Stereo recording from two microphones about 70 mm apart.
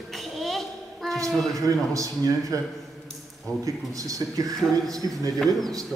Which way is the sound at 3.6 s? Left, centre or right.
Right.